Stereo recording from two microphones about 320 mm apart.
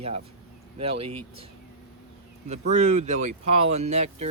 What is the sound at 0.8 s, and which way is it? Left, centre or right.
Speech, centre.